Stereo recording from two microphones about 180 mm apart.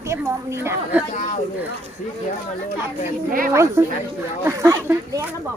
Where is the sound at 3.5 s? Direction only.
15° right (ahead or behind).